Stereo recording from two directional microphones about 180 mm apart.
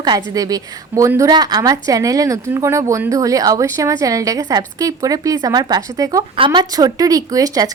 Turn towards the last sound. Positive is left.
turn(degrees=-20)  # may be behind; listen again after turning